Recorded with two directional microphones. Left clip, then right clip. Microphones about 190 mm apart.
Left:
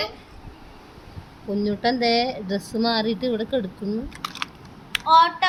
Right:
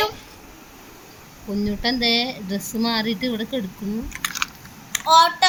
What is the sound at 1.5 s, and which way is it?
Speech, 10° left (ahead or behind).